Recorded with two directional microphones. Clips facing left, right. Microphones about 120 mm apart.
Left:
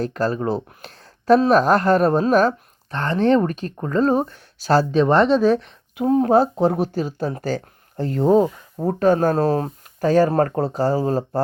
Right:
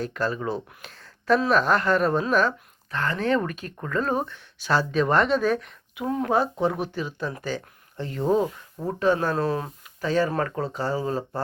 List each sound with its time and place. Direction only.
0.0 s speech: 40° left (ahead or behind)